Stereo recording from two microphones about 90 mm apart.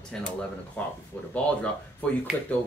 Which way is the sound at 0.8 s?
20° left (ahead or behind).